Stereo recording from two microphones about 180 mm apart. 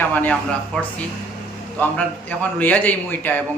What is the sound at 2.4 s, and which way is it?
A man's voice, 10° left (ahead or behind).